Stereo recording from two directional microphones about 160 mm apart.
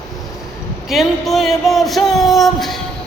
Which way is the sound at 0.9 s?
Centre (ahead or behind).